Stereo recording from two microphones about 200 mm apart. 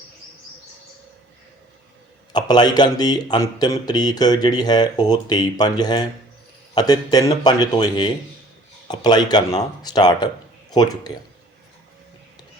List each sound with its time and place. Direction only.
2.3 s speech: 20° left (ahead or behind)